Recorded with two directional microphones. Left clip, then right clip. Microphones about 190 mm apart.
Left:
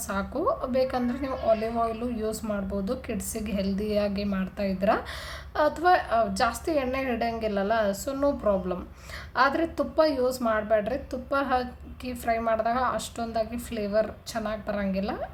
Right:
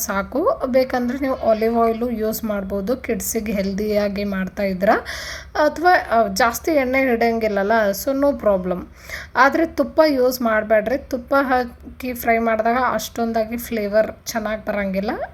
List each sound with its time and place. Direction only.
0.0 s a woman's voice: 40° right (ahead or behind)